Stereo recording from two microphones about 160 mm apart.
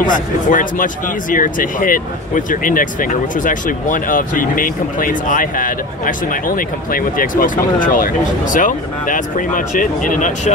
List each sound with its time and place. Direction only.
0.0 s speech: 55° left (ahead or behind)